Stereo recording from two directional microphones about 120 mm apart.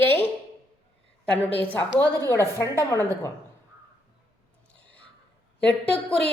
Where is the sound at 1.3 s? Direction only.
15° left (ahead or behind).